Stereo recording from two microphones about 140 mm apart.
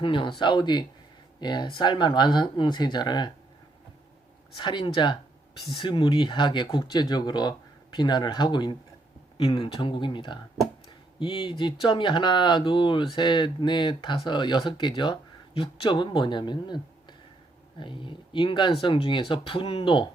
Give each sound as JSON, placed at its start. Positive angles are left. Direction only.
{"t": 0.0, "sound": "speech", "side_deg": 35}
{"t": 4.5, "sound": "speech", "side_deg": 35}